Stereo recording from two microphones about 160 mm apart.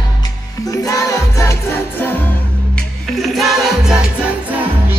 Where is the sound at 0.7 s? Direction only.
20° left (ahead or behind).